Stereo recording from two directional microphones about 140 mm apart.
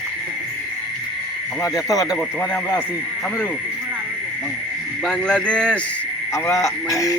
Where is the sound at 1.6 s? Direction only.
25° left (ahead or behind).